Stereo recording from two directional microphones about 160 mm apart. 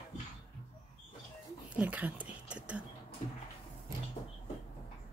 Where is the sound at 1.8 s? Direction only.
10° right (ahead or behind).